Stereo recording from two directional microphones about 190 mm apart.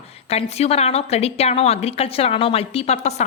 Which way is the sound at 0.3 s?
35° left (ahead or behind).